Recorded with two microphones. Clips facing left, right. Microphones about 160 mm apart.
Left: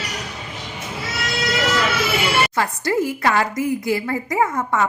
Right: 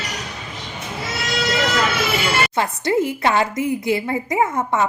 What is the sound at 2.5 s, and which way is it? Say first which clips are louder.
A woman's voice: right 1 dB; 25° right (ahead or behind).